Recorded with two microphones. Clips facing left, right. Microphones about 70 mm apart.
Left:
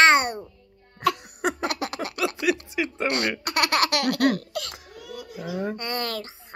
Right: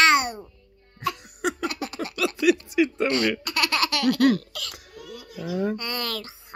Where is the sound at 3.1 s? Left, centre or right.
Left.